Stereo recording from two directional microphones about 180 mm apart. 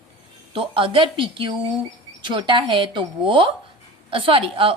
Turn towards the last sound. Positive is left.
turn(degrees=-30)  # may be behind; listen again after turning